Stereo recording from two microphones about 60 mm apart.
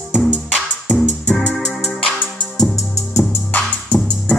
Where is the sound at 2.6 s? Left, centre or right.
Left.